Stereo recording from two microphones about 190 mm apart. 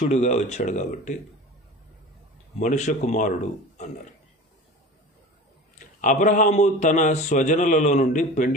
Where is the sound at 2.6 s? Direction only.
40° left (ahead or behind).